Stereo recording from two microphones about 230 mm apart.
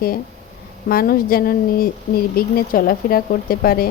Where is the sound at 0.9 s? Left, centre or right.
Left.